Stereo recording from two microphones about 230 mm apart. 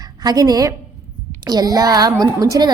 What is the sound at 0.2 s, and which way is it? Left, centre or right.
A woman's voice, centre.